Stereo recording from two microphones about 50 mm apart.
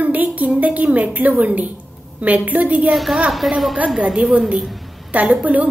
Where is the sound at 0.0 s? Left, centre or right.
Right.